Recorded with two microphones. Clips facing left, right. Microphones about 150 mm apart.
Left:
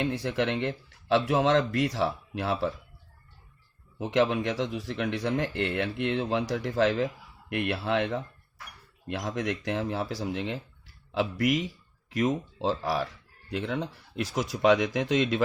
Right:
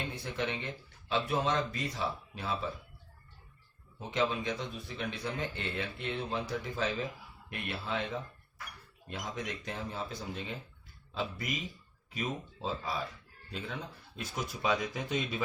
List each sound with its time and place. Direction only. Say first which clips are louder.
0.0 s speech: left 9 dB; 90° left; by 2.7 s 75° left (ahead or behind)
4.0 s speech: left 7 dB; 75° left (ahead or behind)
7.5 s speech: left 9 dB; 90° left